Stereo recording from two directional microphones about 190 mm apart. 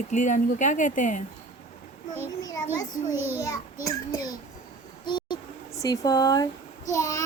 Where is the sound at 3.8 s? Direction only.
20° left (ahead or behind).